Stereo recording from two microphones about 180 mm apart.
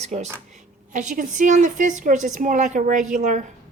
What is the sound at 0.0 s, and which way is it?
A woman's voice, 40° right (ahead or behind).